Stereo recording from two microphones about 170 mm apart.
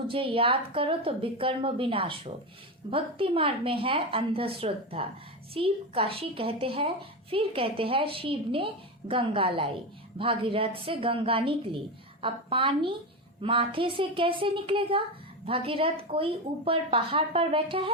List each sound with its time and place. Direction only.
0.1 s a child's voice: 30° right (ahead or behind)